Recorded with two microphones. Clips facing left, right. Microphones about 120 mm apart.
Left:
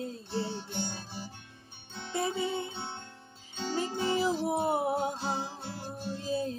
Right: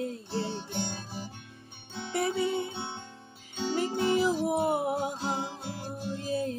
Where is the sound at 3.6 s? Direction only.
15° right (ahead or behind).